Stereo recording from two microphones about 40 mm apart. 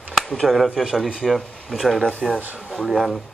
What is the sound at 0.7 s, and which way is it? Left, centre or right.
Speech, centre.